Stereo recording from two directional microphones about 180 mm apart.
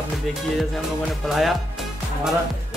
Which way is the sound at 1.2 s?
Centre (ahead or behind).